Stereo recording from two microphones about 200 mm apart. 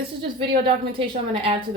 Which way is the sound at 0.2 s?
25° right (ahead or behind).